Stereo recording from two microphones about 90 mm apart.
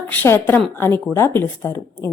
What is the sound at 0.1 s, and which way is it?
A woman's voice, 25° left (ahead or behind).